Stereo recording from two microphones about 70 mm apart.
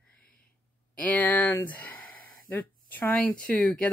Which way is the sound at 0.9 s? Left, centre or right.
Left.